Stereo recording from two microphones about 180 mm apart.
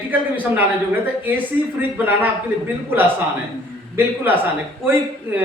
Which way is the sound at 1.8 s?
10° right (ahead or behind).